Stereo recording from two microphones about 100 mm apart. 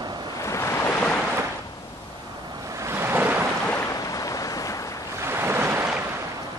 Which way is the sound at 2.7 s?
25° right (ahead or behind).